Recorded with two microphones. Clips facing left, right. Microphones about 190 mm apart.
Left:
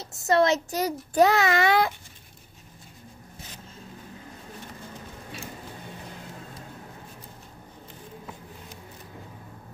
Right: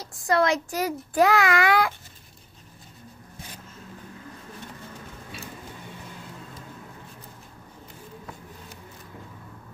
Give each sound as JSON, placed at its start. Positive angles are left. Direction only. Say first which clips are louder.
{"t": 0.0, "sound": "a child's voice", "louder": "left 1 dB", "side_deg": 25}